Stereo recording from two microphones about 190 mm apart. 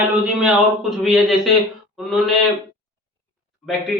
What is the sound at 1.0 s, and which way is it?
Speech, centre (ahead or behind).